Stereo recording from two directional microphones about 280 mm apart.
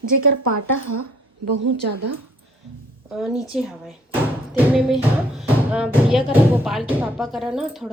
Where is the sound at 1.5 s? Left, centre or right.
Right.